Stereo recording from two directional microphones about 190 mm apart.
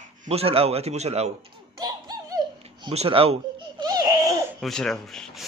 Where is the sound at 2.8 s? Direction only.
30° right (ahead or behind).